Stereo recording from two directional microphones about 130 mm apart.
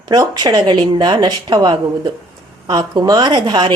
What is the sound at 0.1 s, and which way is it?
Speech, 30° right (ahead or behind).